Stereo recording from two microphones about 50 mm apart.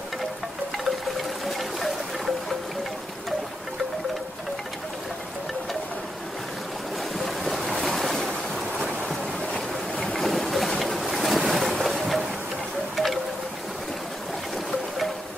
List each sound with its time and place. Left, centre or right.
0.8 s wind chime: centre
7.2 s boat: centre
7.6 s waves: centre
9.5 s a sound: centre
10.1 s boat: centre
12.9 s wind chime: centre